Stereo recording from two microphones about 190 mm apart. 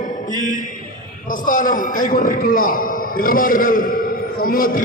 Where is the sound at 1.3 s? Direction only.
45° left (ahead or behind).